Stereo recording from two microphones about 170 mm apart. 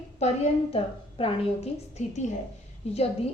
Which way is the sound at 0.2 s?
35° left (ahead or behind).